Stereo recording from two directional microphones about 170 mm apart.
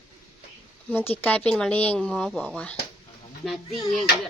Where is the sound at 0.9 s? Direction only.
10° left (ahead or behind).